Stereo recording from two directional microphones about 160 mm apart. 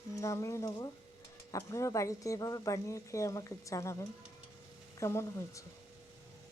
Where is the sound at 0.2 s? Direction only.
20° left (ahead or behind).